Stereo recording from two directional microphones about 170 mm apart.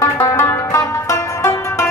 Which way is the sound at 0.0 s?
15° left (ahead or behind).